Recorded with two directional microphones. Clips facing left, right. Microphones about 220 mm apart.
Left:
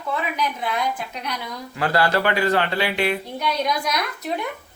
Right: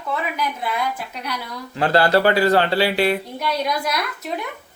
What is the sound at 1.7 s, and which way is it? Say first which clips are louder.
Speech: right 4 dB; 30° right (ahead or behind).